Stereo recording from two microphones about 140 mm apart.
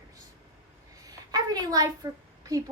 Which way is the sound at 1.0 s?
25° right (ahead or behind).